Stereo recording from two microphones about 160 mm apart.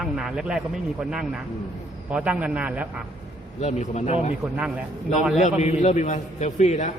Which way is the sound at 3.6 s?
45° left (ahead or behind).